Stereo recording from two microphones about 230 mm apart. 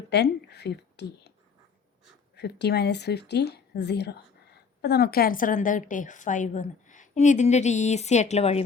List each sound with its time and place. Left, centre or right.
0.1 s a woman's voice: left
2.3 s a woman's voice: left